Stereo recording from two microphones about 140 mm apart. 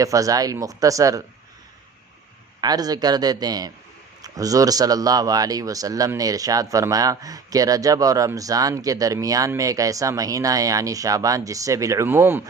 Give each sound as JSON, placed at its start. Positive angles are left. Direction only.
{"t": 0.0, "sound": "a man's voice", "side_deg": -25}
{"t": 2.6, "sound": "a man's voice", "side_deg": -30}